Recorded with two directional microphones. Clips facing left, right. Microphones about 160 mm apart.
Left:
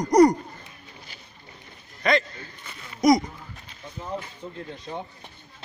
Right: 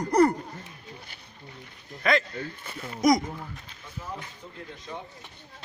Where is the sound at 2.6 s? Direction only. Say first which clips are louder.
Right 6 dB; 30° right (ahead or behind).